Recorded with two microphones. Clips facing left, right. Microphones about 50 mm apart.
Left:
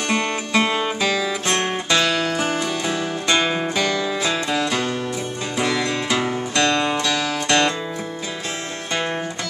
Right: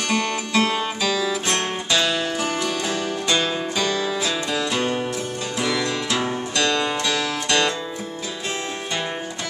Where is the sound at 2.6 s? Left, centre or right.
Centre.